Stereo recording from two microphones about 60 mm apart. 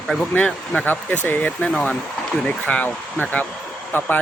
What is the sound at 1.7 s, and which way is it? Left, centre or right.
Speech, centre.